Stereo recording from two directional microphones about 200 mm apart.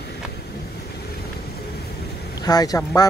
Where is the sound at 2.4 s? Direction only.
20° left (ahead or behind).